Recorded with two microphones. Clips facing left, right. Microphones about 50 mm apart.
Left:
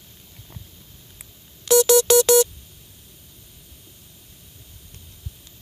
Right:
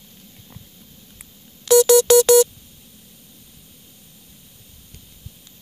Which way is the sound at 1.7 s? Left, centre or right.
Left.